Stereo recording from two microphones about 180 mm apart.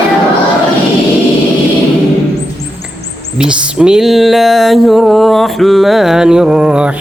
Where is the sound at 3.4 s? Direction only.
5° right (ahead or behind).